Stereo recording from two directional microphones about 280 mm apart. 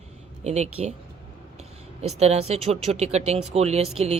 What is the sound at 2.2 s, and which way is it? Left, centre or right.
A woman's voice, right.